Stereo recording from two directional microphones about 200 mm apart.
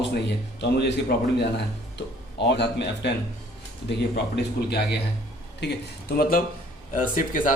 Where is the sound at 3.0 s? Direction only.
55° left (ahead or behind).